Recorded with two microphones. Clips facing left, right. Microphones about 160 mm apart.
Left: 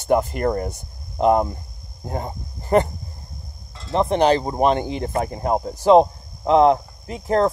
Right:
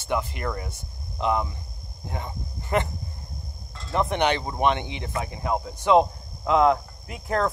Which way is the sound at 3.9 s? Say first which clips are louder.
Left 6 dB; 30° left (ahead or behind).